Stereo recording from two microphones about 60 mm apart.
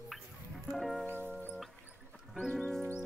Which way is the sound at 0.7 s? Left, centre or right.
Centre.